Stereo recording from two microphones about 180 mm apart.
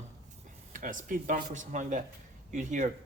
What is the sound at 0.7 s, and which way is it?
Speech, 50° right (ahead or behind).